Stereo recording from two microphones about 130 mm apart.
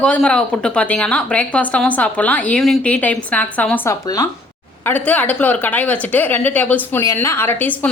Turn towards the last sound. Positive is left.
turn(degrees=15)  # may be behind; listen again after turning